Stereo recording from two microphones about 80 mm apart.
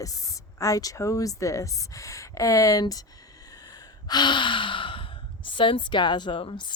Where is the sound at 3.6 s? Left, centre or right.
Left.